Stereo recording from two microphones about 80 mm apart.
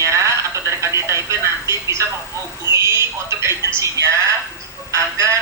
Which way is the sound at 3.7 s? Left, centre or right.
Right.